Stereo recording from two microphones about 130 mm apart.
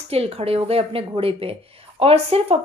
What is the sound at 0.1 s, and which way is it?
Speech, 50° right (ahead or behind).